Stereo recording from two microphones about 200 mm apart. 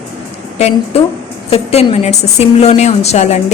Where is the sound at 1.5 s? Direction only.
30° left (ahead or behind).